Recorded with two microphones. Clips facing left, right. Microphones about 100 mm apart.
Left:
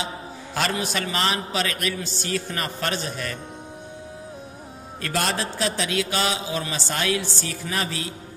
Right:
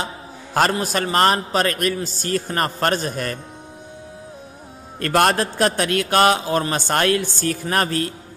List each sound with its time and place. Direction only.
0.6 s a man's voice: 45° right (ahead or behind)
5.0 s a man's voice: 55° right (ahead or behind)